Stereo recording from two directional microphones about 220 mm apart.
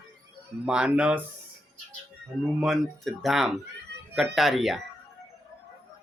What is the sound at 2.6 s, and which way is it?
Speech, centre (ahead or behind).